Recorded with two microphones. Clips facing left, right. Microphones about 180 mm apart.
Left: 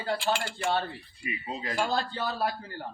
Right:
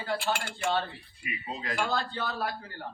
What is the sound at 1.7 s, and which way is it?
Speech, 35° left (ahead or behind).